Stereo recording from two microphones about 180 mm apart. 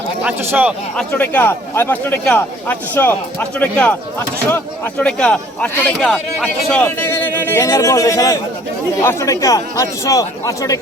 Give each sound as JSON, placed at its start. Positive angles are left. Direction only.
{"t": 0.2, "sound": "a man's voice", "side_deg": -10}
{"t": 0.9, "sound": "speech", "side_deg": 10}